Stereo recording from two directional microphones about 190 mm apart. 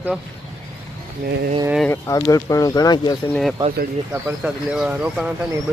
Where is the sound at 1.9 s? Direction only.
15° left (ahead or behind).